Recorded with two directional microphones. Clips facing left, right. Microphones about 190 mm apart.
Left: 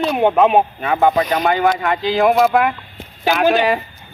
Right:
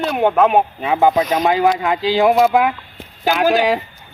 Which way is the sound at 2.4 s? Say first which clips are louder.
Right 1 dB; centre (ahead or behind).